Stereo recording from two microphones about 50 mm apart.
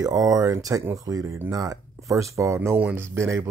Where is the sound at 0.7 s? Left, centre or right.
Right.